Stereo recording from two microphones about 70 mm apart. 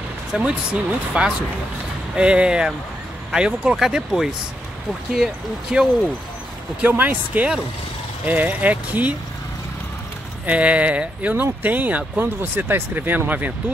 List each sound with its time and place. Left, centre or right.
0.3 s speech: centre
5.7 s speech: centre
6.8 s speech: right
10.4 s speech: centre